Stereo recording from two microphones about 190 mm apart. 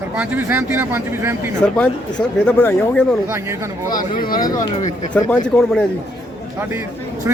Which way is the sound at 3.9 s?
50° left (ahead or behind).